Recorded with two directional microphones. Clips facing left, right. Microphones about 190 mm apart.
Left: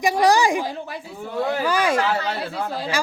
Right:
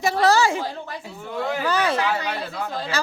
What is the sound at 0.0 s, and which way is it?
Speech, 15° left (ahead or behind).